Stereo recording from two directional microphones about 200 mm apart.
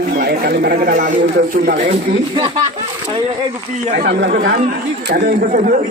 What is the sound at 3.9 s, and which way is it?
Speech, 50° right (ahead or behind).